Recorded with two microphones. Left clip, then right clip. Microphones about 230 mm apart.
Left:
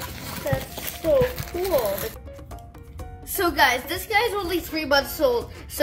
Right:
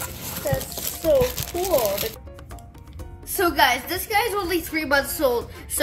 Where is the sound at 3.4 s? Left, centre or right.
Centre.